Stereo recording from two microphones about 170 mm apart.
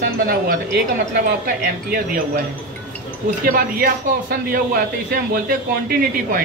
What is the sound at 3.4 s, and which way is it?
Speech, 60° right (ahead or behind).